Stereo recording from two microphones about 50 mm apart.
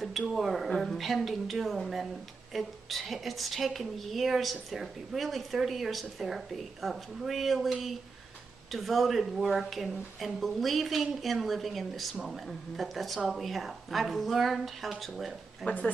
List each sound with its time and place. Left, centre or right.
0.0 s a woman's voice: centre
15.6 s speech: left